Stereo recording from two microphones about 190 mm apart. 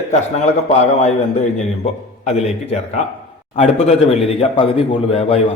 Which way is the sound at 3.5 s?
35° left (ahead or behind).